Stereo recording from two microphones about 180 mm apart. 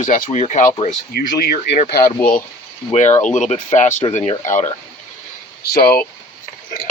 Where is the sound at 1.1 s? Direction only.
55° left (ahead or behind).